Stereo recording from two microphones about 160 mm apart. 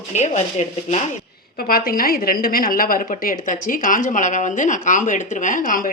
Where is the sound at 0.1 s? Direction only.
45° left (ahead or behind).